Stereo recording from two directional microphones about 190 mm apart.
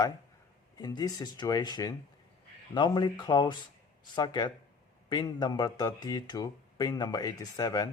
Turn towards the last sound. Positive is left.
turn(degrees=20)  # may be behind; listen again after turning